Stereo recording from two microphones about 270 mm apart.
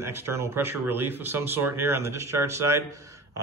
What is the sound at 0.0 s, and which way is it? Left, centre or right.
Speech, centre.